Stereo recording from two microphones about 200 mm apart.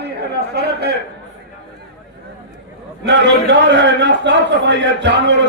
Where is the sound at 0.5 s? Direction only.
55° right (ahead or behind).